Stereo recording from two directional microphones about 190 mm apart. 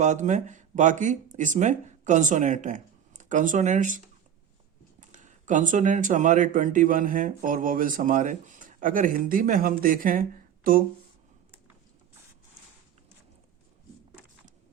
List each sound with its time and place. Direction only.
0.0 s speech: 40° right (ahead or behind)